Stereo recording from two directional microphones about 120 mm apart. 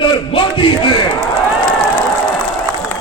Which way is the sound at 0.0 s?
45° left (ahead or behind).